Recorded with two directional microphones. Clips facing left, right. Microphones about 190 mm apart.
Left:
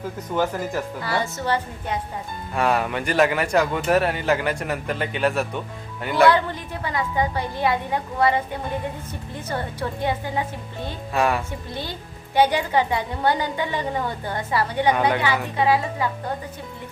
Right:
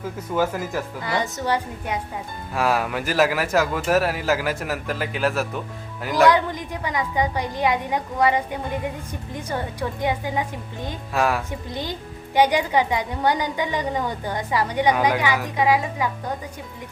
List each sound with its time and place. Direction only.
1.0 s a woman's voice: 20° right (ahead or behind)
2.6 s speech: centre (ahead or behind)
6.3 s a woman's voice: 15° right (ahead or behind)
11.1 s speech: centre (ahead or behind)
11.7 s a woman's voice: 15° right (ahead or behind)